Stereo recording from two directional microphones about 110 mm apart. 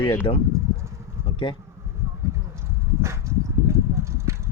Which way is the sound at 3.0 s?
25° right (ahead or behind).